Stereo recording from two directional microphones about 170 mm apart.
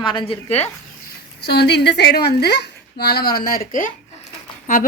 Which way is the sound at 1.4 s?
75° left (ahead or behind).